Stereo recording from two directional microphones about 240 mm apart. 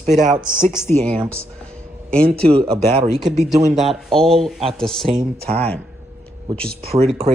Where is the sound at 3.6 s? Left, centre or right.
Right.